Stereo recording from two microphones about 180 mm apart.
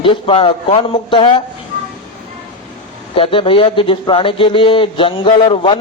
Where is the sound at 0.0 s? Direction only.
30° left (ahead or behind).